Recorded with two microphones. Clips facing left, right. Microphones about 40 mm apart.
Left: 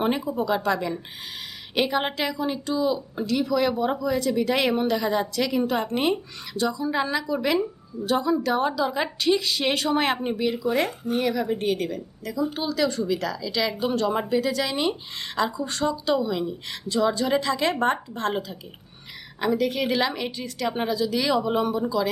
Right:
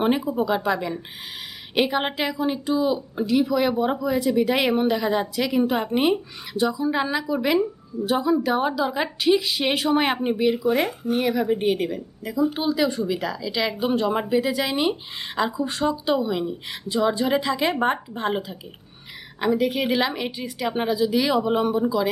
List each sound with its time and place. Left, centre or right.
0.0 s speech: centre